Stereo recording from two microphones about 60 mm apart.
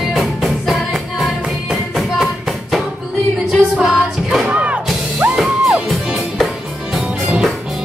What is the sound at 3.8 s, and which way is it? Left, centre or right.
Music, centre.